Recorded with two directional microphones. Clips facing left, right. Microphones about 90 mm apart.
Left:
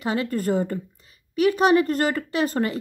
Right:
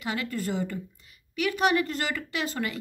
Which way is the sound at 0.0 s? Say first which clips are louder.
Left 7 dB; 35° left (ahead or behind).